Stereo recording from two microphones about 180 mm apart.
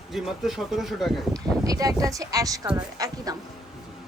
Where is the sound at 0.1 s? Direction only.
Centre (ahead or behind).